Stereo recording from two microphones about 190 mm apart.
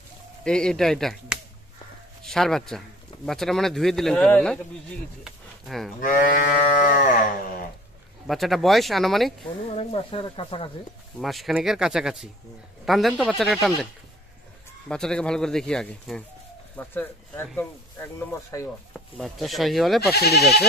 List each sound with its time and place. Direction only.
0.4 s speech: 5° left (ahead or behind)
5.9 s livestock: 45° left (ahead or behind)
8.3 s speech: centre (ahead or behind)
9.8 s speech: 30° left (ahead or behind)
11.1 s speech: centre (ahead or behind)
14.9 s speech: 5° left (ahead or behind)
18.5 s speech: 15° left (ahead or behind)
18.9 s speech: centre (ahead or behind)
20.2 s speech: 55° left (ahead or behind)